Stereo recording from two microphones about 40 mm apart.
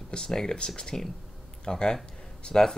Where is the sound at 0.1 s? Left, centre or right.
Centre.